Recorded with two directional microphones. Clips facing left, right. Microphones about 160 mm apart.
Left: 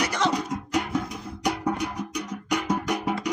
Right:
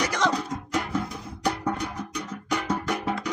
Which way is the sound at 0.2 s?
20° left (ahead or behind).